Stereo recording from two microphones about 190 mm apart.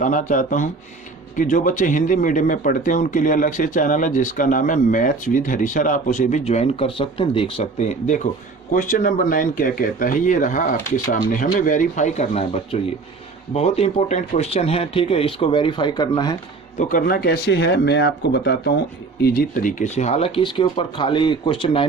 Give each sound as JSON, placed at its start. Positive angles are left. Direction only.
{"t": 0.0, "sound": "speech", "side_deg": 40}
{"t": 16.7, "sound": "speech", "side_deg": 50}